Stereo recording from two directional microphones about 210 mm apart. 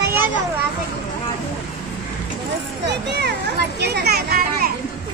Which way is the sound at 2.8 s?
55° right (ahead or behind).